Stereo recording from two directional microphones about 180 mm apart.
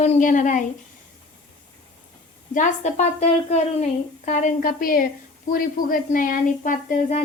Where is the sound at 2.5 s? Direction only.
40° left (ahead or behind).